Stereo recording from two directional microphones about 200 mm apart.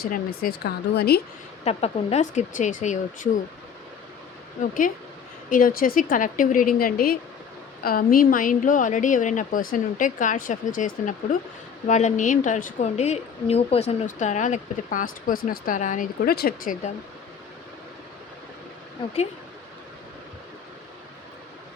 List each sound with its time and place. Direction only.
0.0 s a woman's voice: 50° left (ahead or behind)
1.6 s a woman's voice: 30° left (ahead or behind)
4.6 s a woman's voice: 40° left (ahead or behind)